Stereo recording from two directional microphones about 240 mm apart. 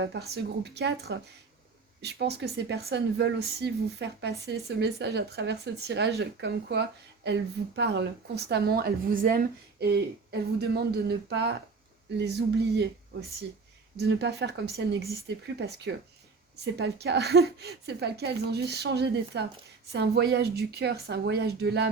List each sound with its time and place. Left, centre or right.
0.0 s a woman's voice: right
13.9 s speech: right